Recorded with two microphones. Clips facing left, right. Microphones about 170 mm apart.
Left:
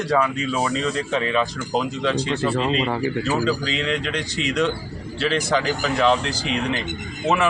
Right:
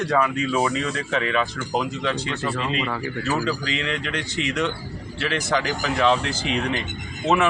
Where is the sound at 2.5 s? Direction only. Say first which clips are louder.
Left 3 dB; 30° left (ahead or behind).